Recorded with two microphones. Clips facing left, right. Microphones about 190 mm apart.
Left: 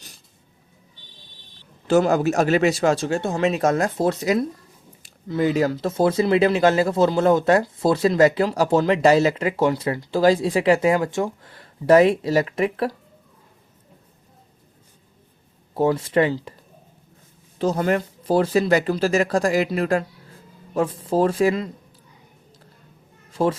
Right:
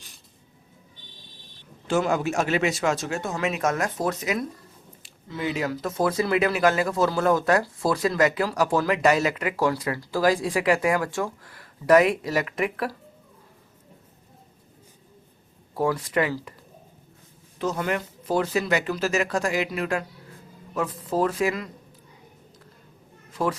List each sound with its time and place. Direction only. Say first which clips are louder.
1.9 s speech: left 6 dB; 40° left (ahead or behind)
15.7 s speech: left 5 dB; 25° left (ahead or behind)
17.6 s speech: left 6 dB; 35° left (ahead or behind)
23.3 s a woman's voice: left 5 dB; 25° left (ahead or behind)